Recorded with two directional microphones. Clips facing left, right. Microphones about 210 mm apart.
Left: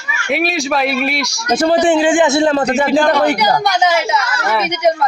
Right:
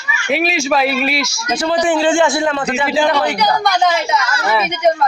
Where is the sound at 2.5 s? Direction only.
40° left (ahead or behind).